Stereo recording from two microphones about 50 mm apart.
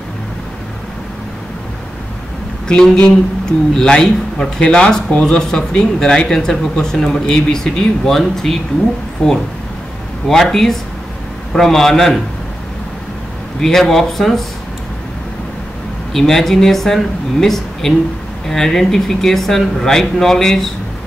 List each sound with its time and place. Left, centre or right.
2.7 s speech: centre
9.2 s speech: centre
10.2 s speech: centre
13.6 s speech: centre
16.1 s speech: centre